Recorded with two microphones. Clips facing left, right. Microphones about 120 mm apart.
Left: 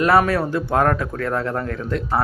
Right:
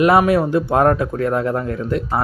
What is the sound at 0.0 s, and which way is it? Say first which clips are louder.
Speech: right 3 dB; 15° right (ahead or behind).